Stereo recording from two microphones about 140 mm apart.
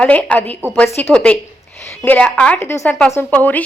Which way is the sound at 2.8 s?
Centre (ahead or behind).